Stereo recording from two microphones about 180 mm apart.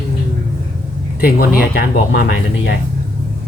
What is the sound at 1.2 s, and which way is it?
Speech, 55° left (ahead or behind).